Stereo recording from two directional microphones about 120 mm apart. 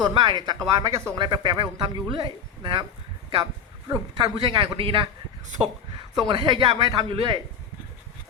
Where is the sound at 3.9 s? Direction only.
30° right (ahead or behind).